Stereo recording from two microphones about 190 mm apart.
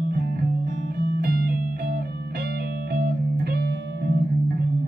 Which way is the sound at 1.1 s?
55° right (ahead or behind).